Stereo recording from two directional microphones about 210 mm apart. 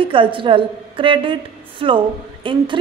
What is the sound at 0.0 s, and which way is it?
A woman's voice, 25° right (ahead or behind).